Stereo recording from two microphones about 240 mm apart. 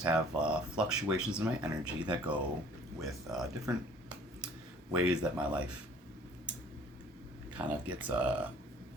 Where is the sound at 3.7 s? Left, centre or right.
Centre.